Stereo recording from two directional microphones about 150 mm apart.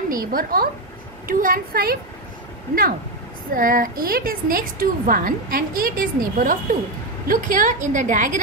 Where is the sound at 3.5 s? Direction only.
70° right (ahead or behind).